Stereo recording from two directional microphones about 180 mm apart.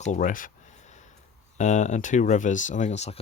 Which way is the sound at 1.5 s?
40° left (ahead or behind).